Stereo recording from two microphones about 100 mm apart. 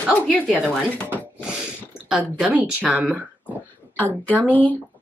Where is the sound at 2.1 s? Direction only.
15° right (ahead or behind).